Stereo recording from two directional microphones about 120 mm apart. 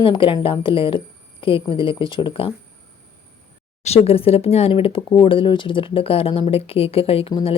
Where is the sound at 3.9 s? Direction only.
55° left (ahead or behind).